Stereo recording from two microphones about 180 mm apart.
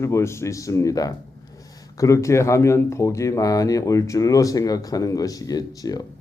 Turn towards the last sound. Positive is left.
turn(degrees=20)  # may be behind; listen again after turning